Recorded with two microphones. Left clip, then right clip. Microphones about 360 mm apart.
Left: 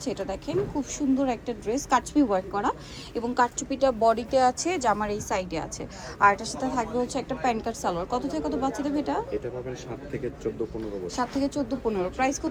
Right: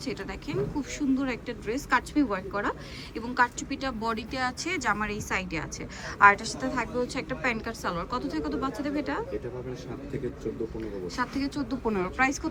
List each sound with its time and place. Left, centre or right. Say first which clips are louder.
0.0 s a woman's voice: left 4 dB; centre
11.2 s a woman's voice: left 4 dB; centre